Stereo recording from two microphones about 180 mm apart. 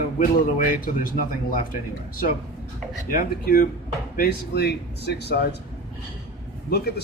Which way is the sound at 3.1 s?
55° left (ahead or behind).